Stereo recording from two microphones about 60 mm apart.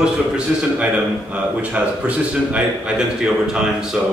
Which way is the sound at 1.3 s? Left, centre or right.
Right.